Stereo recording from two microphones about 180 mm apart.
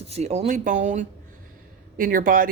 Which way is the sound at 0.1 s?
35° right (ahead or behind).